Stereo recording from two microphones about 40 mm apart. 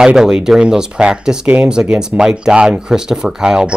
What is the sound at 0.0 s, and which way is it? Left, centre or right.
Speech, centre.